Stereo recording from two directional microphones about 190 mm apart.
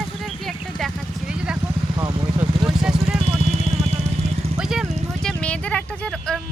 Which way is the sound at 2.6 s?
5° right (ahead or behind).